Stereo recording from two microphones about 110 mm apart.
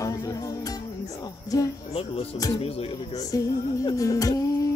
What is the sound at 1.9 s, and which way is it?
Speech, 65° left (ahead or behind).